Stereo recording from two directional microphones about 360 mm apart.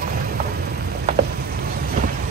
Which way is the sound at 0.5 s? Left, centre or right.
Right.